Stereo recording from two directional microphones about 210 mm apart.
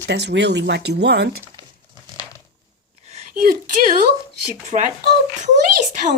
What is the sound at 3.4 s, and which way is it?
Speech, 40° right (ahead or behind).